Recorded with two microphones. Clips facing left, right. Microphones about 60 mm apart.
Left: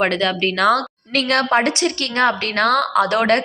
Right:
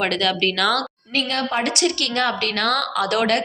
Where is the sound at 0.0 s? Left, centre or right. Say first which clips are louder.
Left 2 dB; left.